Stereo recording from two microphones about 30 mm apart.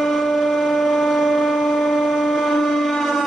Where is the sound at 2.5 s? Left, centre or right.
Centre.